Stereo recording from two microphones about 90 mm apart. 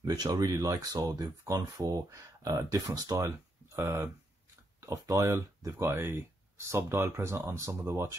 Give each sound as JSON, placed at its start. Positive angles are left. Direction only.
{"t": 0.0, "sound": "speech", "side_deg": -45}
{"t": 3.2, "sound": "speech", "side_deg": -30}